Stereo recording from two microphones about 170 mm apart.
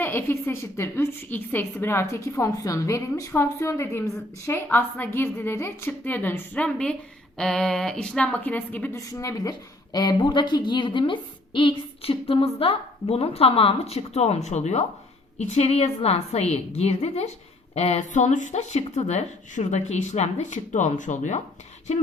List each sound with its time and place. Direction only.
0.0 s a woman's voice: 15° left (ahead or behind); by 21.4 s 45° left (ahead or behind)